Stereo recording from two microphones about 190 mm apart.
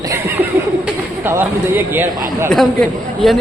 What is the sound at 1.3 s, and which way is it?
Speech, 10° right (ahead or behind).